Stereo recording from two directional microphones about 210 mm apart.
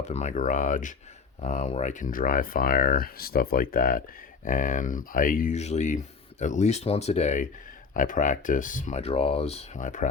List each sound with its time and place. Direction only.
0.0 s speech: 35° left (ahead or behind)